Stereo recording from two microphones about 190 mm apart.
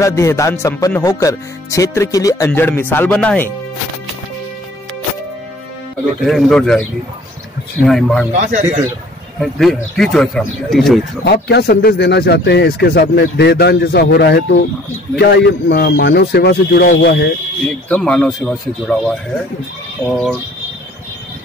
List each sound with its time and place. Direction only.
0.0 s speech: 15° left (ahead or behind)
6.2 s speech: centre (ahead or behind)
8.3 s speech: 40° right (ahead or behind)
9.4 s speech: centre (ahead or behind)
11.2 s speech: 60° left (ahead or behind)
17.6 s speech: 5° left (ahead or behind)